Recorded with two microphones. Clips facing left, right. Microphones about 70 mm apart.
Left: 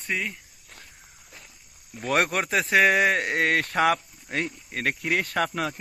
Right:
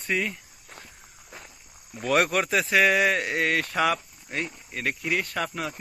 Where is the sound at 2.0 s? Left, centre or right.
Left.